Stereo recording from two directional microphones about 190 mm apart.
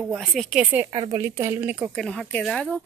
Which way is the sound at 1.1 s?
15° right (ahead or behind).